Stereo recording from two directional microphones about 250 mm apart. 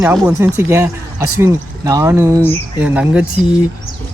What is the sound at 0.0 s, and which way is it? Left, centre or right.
A woman's voice, centre.